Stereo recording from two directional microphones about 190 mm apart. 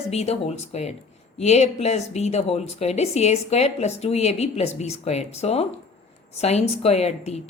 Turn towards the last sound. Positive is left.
turn(degrees=35)  # may be behind; listen again after turning